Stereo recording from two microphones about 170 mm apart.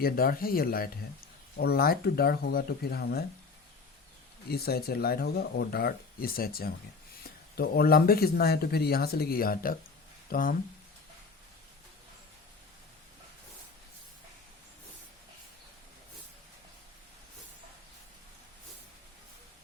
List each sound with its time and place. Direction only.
0.0 s speech: 60° left (ahead or behind)
4.4 s speech: 65° left (ahead or behind)